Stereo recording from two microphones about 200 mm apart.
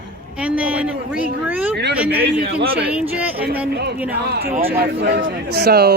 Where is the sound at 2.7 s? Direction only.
5° right (ahead or behind).